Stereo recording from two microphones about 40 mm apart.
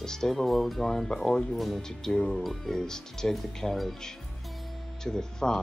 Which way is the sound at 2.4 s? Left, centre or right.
Centre.